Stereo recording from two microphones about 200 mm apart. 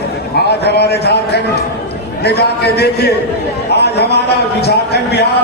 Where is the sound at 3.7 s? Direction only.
55° left (ahead or behind).